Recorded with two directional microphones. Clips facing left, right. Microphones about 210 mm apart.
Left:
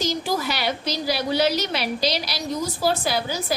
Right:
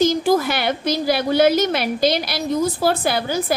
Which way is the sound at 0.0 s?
50° right (ahead or behind).